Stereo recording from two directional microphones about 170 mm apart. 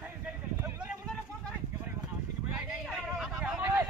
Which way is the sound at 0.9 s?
5° left (ahead or behind).